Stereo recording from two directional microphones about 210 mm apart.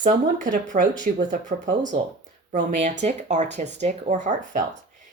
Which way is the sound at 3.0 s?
35° right (ahead or behind).